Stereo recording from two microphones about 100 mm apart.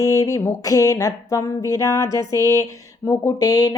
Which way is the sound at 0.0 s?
35° left (ahead or behind).